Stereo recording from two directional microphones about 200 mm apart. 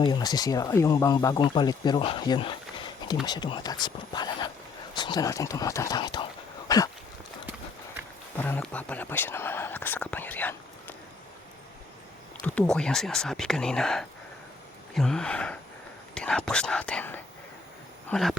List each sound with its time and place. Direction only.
0.0 s speech: 20° left (ahead or behind)
6.7 s a sound: 20° left (ahead or behind)
8.4 s speech: 10° left (ahead or behind)
12.5 s speech: 5° left (ahead or behind)